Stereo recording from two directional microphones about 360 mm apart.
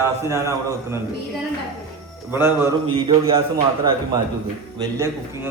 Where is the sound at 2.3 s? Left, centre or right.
Centre.